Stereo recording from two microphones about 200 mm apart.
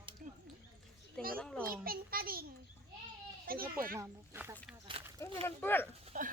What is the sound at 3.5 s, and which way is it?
Speech, 45° right (ahead or behind).